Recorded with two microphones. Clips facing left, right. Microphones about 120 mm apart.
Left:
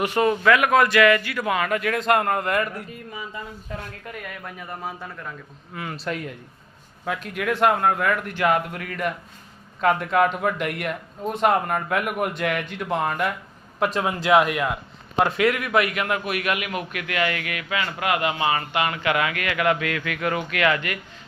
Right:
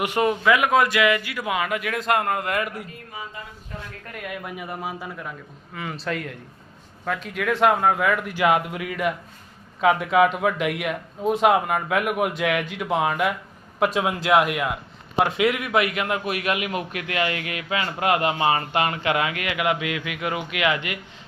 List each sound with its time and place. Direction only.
0.0 s speech: 15° right (ahead or behind)
4.4 s a man's voice: 10° right (ahead or behind)
15.2 s a man's voice: 15° right (ahead or behind)